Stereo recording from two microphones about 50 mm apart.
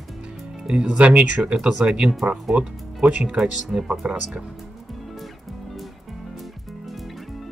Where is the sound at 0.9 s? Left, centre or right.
Right; by 4.4 s centre.